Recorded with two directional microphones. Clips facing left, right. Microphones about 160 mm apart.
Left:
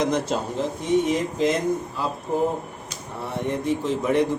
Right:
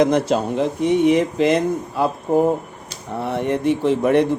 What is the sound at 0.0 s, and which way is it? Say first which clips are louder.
Dishes: right 7 dB; 65° right (ahead or behind).